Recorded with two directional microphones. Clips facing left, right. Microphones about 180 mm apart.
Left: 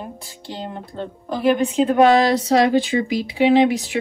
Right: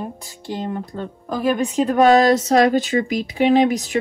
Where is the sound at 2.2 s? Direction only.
45° right (ahead or behind).